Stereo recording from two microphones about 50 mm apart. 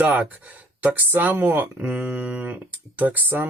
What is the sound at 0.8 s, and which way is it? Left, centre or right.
Speech, right.